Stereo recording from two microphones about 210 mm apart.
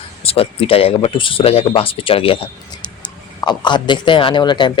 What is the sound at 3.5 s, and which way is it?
Speech, 20° left (ahead or behind).